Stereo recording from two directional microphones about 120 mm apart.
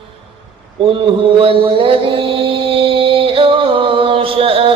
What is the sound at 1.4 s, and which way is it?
Mantra, 45° right (ahead or behind).